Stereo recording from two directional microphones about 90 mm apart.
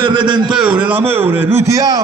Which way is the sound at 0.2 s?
60° right (ahead or behind).